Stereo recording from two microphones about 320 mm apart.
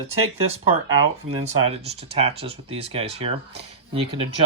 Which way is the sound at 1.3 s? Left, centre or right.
Centre.